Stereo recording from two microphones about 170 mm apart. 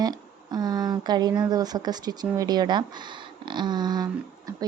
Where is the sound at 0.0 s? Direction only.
25° right (ahead or behind).